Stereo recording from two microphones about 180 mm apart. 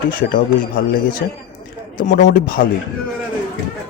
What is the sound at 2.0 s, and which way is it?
Speech, 45° left (ahead or behind).